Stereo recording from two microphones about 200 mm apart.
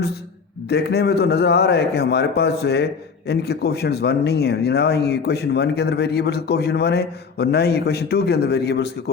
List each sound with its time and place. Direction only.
0.7 s speech: 55° left (ahead or behind)